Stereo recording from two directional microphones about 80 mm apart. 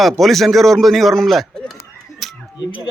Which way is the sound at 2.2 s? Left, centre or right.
Centre.